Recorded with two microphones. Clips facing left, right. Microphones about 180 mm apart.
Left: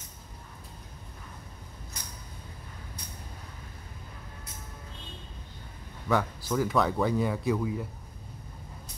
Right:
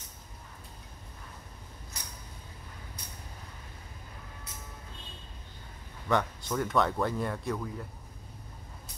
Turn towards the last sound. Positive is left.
turn(degrees=5)  # may be behind; listen again after turning